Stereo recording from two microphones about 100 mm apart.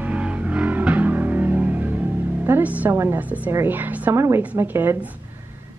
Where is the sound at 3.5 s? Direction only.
20° right (ahead or behind).